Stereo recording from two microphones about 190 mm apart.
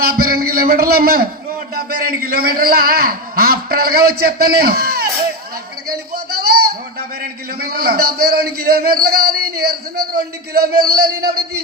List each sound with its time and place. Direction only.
0.0 s a man's voice: 50° right (ahead or behind)
5.9 s a sound: 55° right (ahead or behind)
7.7 s a man's voice: 55° right (ahead or behind)